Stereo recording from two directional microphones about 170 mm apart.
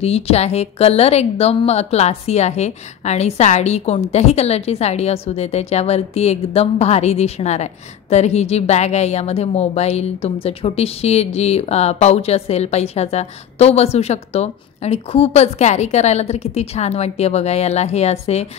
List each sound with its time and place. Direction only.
0.0 s a woman's voice: 35° left (ahead or behind)